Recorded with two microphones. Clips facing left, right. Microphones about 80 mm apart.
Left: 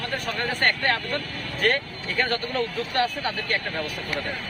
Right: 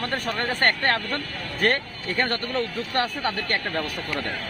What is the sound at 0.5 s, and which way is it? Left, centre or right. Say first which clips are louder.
Speech: right 1 dB; right.